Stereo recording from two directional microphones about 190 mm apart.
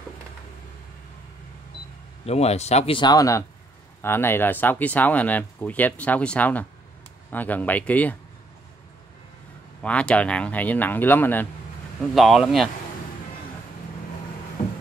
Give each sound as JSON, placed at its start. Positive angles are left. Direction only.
{"t": 2.2, "sound": "speech", "side_deg": 35}
{"t": 9.8, "sound": "speech", "side_deg": 5}
{"t": 12.1, "sound": "speech", "side_deg": 0}